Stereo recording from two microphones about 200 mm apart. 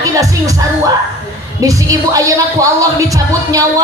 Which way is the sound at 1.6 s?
15° right (ahead or behind).